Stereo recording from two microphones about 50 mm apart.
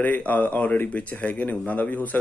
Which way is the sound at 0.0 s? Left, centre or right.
Left.